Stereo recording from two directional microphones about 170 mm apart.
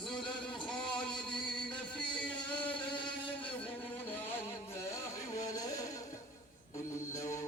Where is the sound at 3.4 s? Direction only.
10° left (ahead or behind).